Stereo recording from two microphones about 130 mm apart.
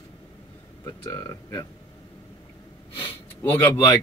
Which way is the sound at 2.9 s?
15° left (ahead or behind).